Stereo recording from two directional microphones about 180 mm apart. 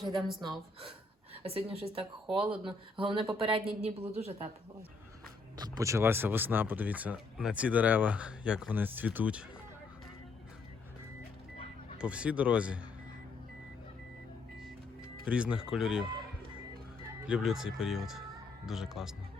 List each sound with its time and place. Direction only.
0.1 s speech: centre (ahead or behind)
0.8 s speech: 30° right (ahead or behind)
2.2 s speech: 5° right (ahead or behind)
2.5 s a woman's voice: 30° right (ahead or behind)
5.5 s speech: 20° right (ahead or behind)
11.9 s speech: 5° right (ahead or behind)
15.2 s speech: 5° right (ahead or behind)
17.2 s speech: 5° right (ahead or behind)